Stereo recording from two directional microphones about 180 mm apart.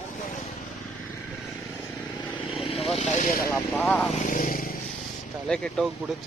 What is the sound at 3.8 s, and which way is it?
Speech, centre (ahead or behind).